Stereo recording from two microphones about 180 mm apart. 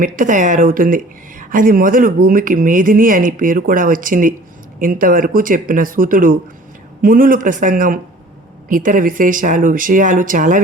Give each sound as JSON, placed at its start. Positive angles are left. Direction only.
{"t": 0.0, "sound": "speech", "side_deg": -45}